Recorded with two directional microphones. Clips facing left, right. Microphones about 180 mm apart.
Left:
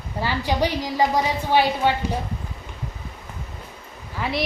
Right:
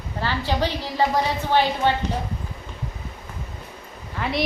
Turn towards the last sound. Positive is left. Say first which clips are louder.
# right 1 dB
turn(degrees=0)  # may be behind; listen again after turning